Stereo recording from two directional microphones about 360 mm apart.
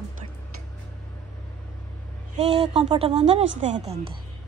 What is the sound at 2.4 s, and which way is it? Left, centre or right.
A woman's voice, centre.